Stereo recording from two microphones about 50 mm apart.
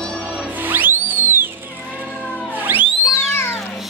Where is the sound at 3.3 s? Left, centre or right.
Left.